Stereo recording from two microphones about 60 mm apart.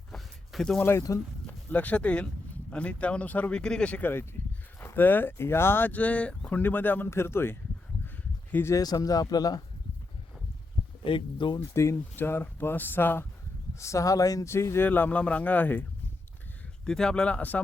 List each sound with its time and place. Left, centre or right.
0.5 s speech: centre
0.9 s speech: left
1.5 s speech: left
3.5 s speech: centre
4.0 s speech: left
6.6 s speech: left
7.1 s speech: left
8.7 s speech: left
11.7 s speech: left
12.1 s speech: left
13.7 s speech: left
14.4 s speech: left
14.8 s a man's voice: left
16.8 s speech: centre